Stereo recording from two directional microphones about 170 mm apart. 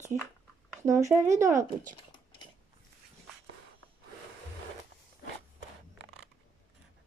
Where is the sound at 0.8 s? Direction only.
15° right (ahead or behind).